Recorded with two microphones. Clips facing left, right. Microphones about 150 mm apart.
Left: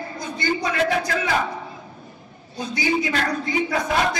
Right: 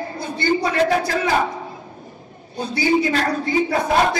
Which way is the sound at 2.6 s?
35° right (ahead or behind).